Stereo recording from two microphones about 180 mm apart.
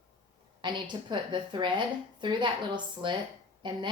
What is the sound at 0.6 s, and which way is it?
A woman's voice, 25° right (ahead or behind).